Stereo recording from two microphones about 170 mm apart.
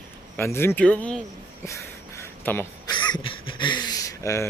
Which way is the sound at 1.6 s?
15° left (ahead or behind).